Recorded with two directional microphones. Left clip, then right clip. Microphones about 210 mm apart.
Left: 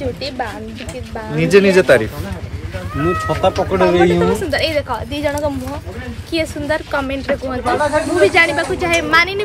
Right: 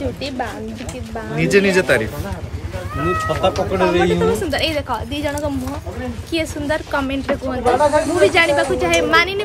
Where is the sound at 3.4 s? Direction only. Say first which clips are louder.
Left 4 dB; 25° left (ahead or behind).